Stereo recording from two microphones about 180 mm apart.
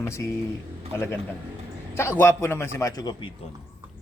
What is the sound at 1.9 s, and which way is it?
A man's voice, 15° left (ahead or behind).